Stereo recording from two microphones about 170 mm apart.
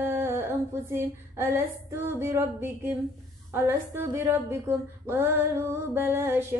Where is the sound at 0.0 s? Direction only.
15° right (ahead or behind).